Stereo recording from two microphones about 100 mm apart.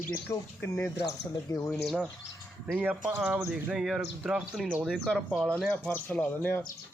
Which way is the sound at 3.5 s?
5° right (ahead or behind).